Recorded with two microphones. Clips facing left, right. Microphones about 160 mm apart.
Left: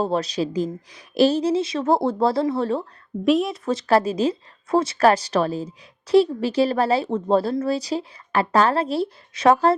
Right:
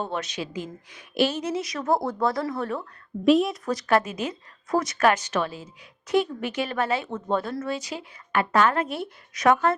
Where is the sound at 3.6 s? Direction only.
30° left (ahead or behind).